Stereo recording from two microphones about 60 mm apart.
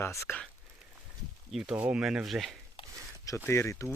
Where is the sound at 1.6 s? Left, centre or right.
Right.